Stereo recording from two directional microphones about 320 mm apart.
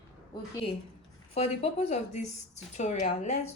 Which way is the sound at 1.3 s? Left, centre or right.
Centre.